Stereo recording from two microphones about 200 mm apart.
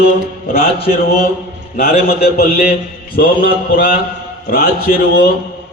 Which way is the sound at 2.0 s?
50° left (ahead or behind).